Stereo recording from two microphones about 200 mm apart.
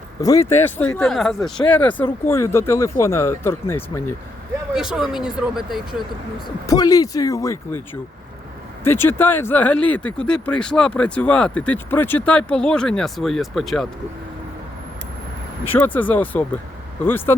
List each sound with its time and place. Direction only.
0.2 s speech: 15° left (ahead or behind)
4.7 s speech: 5° right (ahead or behind)
6.7 s speech: 20° left (ahead or behind)
8.8 s speech: 10° left (ahead or behind)
15.6 s speech: 10° left (ahead or behind)